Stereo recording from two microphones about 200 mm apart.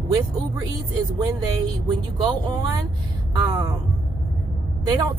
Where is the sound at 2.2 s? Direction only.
20° right (ahead or behind).